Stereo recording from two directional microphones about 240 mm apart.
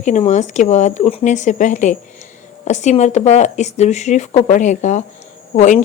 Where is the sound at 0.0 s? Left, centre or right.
Left.